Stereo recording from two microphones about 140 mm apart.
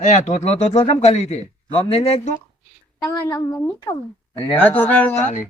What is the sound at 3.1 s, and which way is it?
A man's voice, 20° left (ahead or behind).